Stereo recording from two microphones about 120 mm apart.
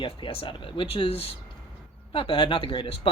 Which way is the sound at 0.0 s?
50° left (ahead or behind).